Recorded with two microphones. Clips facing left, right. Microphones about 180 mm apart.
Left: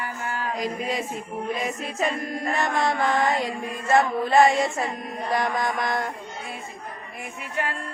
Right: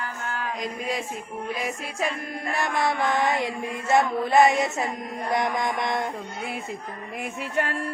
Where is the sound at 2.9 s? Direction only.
15° right (ahead or behind).